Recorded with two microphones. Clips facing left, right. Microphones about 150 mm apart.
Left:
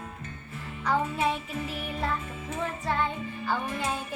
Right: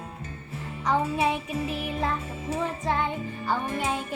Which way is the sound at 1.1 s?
15° right (ahead or behind).